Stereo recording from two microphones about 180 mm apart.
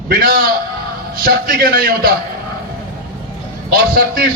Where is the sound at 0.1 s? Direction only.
55° right (ahead or behind).